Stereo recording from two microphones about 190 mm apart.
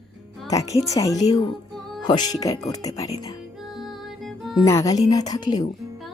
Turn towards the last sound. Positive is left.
turn(degrees=20)  # may be behind; listen again after turning